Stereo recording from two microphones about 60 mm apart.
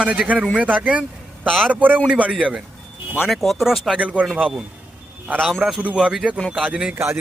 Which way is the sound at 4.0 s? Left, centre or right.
Right.